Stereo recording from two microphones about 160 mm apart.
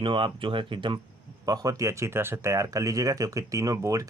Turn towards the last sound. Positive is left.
turn(degrees=-20)  # may be behind; listen again after turning